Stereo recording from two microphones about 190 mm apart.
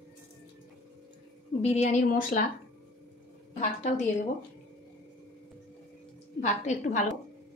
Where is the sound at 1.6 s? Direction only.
40° left (ahead or behind).